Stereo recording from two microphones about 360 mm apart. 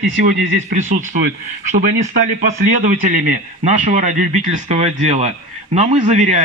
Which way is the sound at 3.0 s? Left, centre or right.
Right.